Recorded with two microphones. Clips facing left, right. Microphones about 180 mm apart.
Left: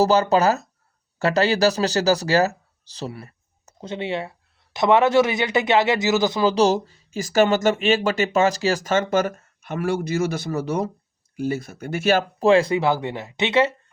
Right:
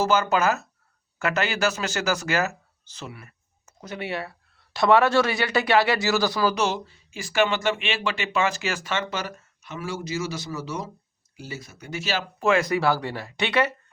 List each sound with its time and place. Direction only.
0.0 s speech: 35° left (ahead or behind)
6.6 s speech: 40° left (ahead or behind)
12.4 s speech: 30° left (ahead or behind)